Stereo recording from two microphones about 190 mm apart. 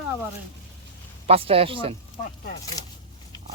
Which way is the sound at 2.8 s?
20° left (ahead or behind).